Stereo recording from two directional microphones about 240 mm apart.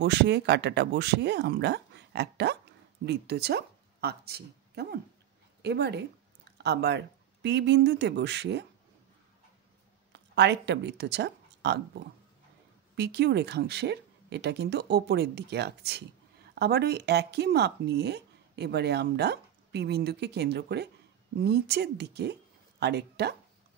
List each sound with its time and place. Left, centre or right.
0.0 s a woman's voice: right
10.3 s speech: right
12.9 s speech: right